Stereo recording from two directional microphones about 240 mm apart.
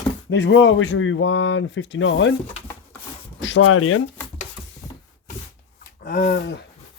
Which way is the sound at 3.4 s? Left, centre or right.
Left.